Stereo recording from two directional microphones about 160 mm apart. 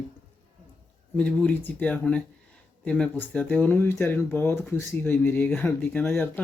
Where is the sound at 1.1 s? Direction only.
5° left (ahead or behind).